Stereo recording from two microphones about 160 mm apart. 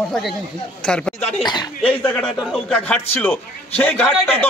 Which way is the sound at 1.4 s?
25° left (ahead or behind).